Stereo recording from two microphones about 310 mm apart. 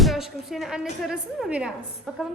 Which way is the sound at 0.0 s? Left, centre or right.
Centre.